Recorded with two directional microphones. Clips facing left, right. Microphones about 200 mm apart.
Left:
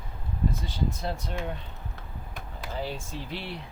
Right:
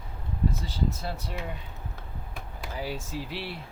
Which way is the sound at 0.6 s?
5° right (ahead or behind).